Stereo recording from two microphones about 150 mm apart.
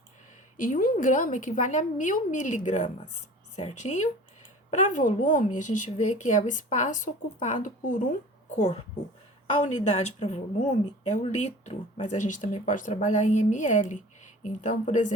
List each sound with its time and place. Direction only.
0.5 s a woman's voice: 65° left (ahead or behind)